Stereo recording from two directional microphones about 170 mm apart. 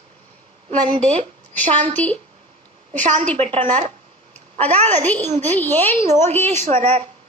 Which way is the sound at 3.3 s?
35° right (ahead or behind).